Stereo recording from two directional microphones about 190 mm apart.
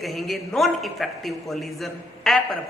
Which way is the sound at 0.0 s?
Centre (ahead or behind).